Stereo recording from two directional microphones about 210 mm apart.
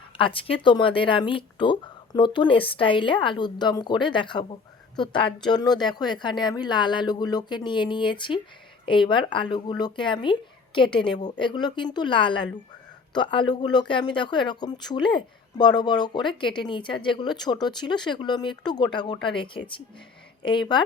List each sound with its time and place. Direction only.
0.2 s speech: 25° left (ahead or behind)